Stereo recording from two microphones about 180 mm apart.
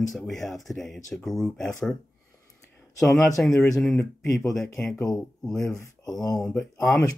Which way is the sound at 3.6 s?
10° left (ahead or behind).